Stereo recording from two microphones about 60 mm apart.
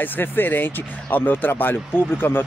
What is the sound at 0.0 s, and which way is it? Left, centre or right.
Speech, left.